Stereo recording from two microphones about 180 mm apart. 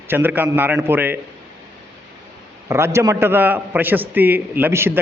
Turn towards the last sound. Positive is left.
turn(degrees=-15)  # may be behind; listen again after turning